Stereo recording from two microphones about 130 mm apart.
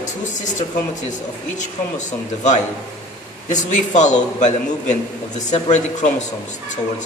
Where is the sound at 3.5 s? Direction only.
70° left (ahead or behind).